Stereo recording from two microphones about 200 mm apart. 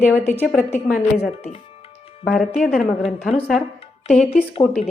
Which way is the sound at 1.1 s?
30° left (ahead or behind).